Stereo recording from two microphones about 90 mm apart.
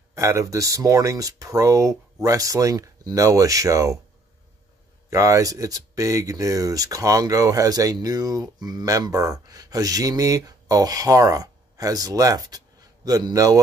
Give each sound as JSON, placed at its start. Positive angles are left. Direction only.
{"t": 0.1, "sound": "speech", "side_deg": -35}
{"t": 5.1, "sound": "speech", "side_deg": -40}